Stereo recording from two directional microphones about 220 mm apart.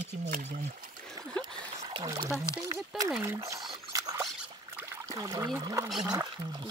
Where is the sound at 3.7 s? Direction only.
15° right (ahead or behind).